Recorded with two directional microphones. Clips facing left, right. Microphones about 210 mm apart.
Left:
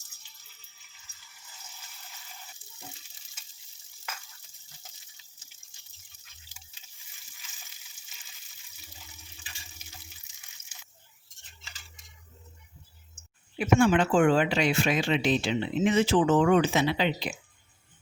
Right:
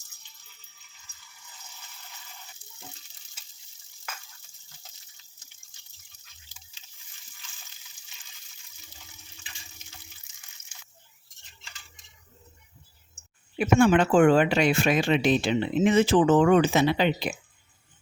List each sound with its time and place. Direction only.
11.6 s cutlery: centre (ahead or behind)
13.6 s speech: 55° right (ahead or behind)